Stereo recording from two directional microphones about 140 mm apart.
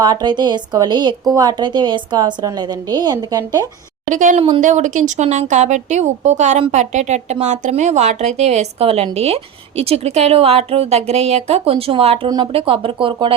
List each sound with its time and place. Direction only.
0.0 s a woman's voice: 30° right (ahead or behind)
4.1 s speech: 65° right (ahead or behind); by 13.3 s 35° right (ahead or behind)